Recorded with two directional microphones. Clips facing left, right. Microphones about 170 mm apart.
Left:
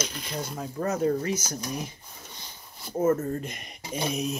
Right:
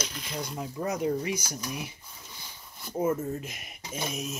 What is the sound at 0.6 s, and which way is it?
Speech, 15° right (ahead or behind).